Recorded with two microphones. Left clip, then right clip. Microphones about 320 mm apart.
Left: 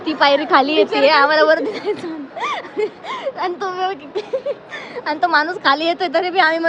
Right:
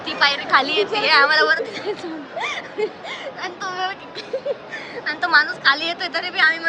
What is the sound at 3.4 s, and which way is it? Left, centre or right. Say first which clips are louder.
Speech: left 4 dB; centre.